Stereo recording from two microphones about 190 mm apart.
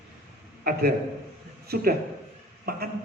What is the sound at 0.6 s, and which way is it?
A man's voice, 55° right (ahead or behind).